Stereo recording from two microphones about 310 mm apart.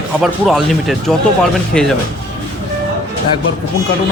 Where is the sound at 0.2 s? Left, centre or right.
Centre.